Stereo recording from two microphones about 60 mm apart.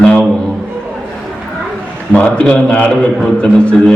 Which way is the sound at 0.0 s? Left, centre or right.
Centre.